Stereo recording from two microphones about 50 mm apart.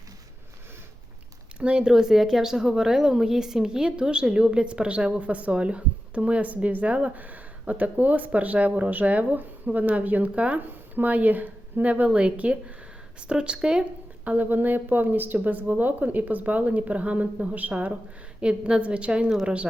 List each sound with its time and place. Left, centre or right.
1.5 s speech: centre
14.3 s speech: right; by 19.6 s centre